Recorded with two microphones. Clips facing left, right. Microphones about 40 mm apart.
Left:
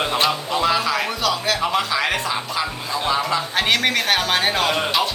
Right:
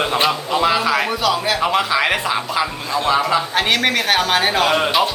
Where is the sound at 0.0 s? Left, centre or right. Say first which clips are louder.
Right 2 dB; centre.